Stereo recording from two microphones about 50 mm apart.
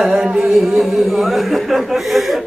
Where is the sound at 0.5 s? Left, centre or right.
Centre.